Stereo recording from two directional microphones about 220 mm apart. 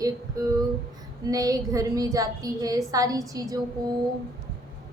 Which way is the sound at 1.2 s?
15° right (ahead or behind).